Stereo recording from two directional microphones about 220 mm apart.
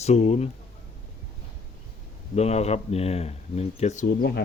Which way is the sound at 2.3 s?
30° left (ahead or behind).